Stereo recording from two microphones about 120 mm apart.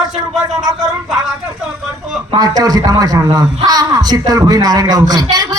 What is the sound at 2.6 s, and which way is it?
Speech, 30° right (ahead or behind).